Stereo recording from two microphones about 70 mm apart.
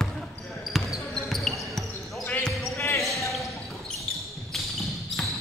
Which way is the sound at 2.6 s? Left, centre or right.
Left.